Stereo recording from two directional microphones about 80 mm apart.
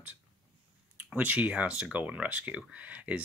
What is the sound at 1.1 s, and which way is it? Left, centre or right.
Speech, centre.